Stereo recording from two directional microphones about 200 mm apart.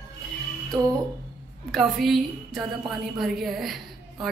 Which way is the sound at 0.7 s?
20° right (ahead or behind).